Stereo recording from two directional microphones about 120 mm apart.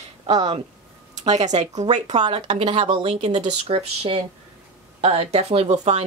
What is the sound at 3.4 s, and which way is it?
Speech, 65° right (ahead or behind).